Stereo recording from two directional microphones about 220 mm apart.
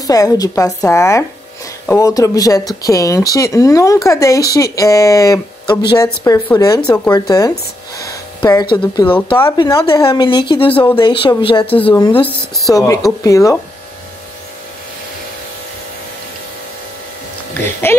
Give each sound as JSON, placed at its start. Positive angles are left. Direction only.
{"t": 0.0, "sound": "speech", "side_deg": 15}
{"t": 17.9, "sound": "speech", "side_deg": 10}